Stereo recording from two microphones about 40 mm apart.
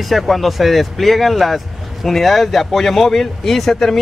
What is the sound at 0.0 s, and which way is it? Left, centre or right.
Speech, centre.